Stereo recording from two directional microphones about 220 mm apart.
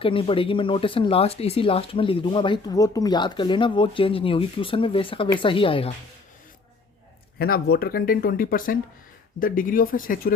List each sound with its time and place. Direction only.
0.0 s speech: 25° left (ahead or behind)
7.3 s speech: 45° left (ahead or behind)